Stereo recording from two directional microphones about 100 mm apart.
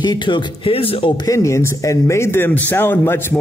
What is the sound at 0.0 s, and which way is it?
Speech, 50° left (ahead or behind).